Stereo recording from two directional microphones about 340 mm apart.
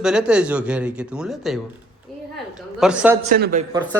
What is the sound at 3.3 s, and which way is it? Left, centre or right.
Speech, right.